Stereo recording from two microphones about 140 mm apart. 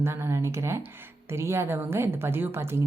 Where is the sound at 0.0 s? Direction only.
20° right (ahead or behind).